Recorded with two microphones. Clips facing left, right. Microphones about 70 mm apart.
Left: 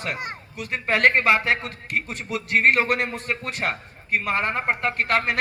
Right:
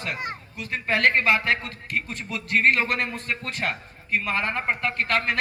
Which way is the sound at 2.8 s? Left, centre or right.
Left.